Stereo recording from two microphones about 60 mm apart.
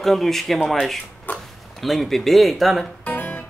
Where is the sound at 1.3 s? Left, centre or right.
Left.